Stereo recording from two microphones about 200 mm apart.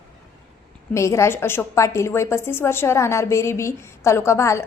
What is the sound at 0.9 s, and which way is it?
A woman's voice, 15° left (ahead or behind).